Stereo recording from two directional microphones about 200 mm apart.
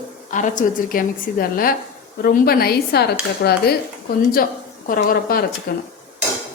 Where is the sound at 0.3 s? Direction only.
40° left (ahead or behind); by 3.6 s 55° left (ahead or behind).